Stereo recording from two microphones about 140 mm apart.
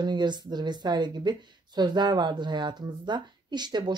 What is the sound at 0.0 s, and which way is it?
Speech, 30° right (ahead or behind).